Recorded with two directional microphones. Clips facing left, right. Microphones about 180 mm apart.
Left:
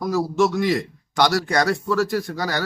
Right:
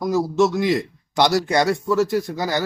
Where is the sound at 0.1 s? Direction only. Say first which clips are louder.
Right 2 dB; 20° right (ahead or behind).